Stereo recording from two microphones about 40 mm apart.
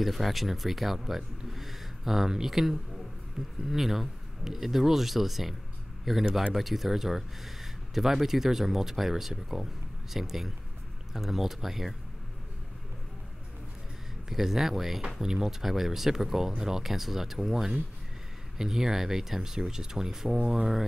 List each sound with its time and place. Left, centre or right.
0.0 s speech: centre
14.3 s speech: centre